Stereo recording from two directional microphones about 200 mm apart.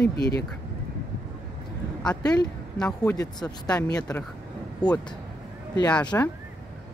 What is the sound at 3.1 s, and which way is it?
Speech, 20° left (ahead or behind).